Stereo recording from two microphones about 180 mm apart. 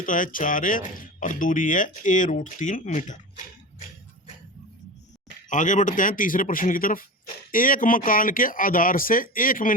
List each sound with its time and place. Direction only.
0.0 s speech: 50° left (ahead or behind)
5.5 s speech: 45° left (ahead or behind)